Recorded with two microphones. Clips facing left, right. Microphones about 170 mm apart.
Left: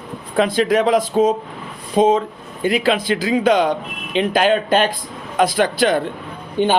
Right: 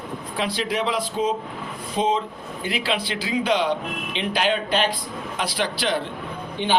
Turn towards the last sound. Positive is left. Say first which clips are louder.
# left 8 dB
turn(degrees=45)  # may be behind; listen again after turning